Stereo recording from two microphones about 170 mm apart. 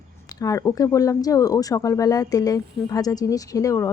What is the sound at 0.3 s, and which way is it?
Speech, 20° left (ahead or behind).